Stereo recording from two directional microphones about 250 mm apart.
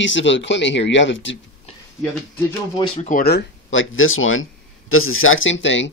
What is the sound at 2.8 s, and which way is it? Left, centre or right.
Speech, left.